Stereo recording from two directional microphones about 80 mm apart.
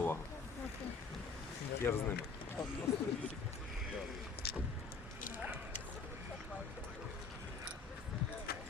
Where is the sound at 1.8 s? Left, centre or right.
Left.